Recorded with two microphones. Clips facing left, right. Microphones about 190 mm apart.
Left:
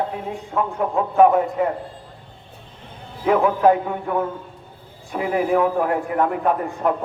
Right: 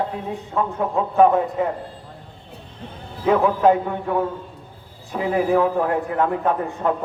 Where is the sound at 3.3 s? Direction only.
15° left (ahead or behind).